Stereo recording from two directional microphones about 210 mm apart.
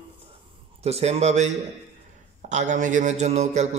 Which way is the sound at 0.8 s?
30° right (ahead or behind).